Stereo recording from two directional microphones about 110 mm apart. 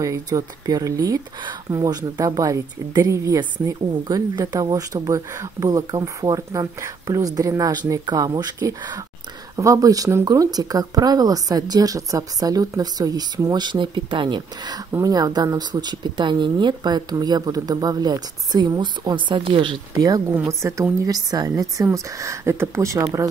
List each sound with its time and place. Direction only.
0.0 s a woman's voice: 30° right (ahead or behind)
14.9 s a woman's voice: 35° right (ahead or behind); by 19.8 s 50° right (ahead or behind)
20.0 s a woman's voice: 35° right (ahead or behind)